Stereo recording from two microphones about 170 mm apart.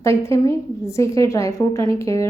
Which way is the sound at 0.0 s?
15° left (ahead or behind).